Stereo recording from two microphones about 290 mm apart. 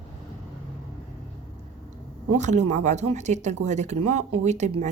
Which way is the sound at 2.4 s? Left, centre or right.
Right.